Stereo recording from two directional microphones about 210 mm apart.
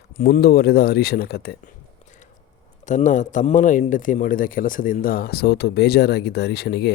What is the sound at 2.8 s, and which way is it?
A man's voice, 35° left (ahead or behind).